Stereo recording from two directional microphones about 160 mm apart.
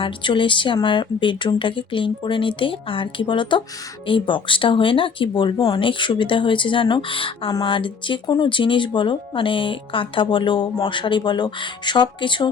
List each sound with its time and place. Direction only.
0.0 s speech: 30° left (ahead or behind)